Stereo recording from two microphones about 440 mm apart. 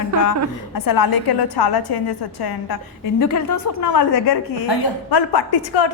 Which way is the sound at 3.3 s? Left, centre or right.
Left.